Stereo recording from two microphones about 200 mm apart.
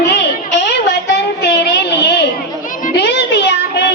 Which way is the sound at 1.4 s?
60° left (ahead or behind).